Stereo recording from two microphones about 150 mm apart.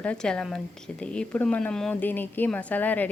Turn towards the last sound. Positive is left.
turn(degrees=10)  # may be behind; listen again after turning